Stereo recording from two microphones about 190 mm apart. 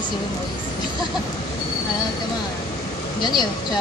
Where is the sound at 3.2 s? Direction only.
20° left (ahead or behind).